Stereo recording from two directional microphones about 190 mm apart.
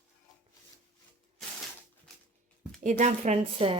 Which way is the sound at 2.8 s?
40° right (ahead or behind).